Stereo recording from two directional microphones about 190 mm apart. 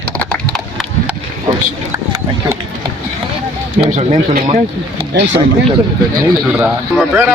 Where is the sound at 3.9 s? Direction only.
45° right (ahead or behind).